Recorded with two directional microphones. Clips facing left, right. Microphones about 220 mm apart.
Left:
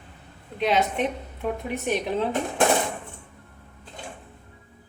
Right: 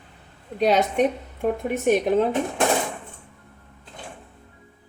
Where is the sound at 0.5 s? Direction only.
40° right (ahead or behind).